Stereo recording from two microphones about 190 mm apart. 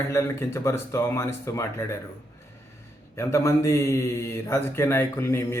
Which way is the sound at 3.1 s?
15° left (ahead or behind).